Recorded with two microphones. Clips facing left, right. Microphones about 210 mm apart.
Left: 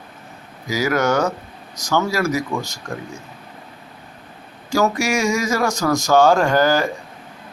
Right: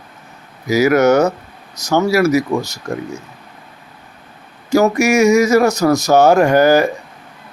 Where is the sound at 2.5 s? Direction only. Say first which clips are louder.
Right 6 dB; 40° right (ahead or behind).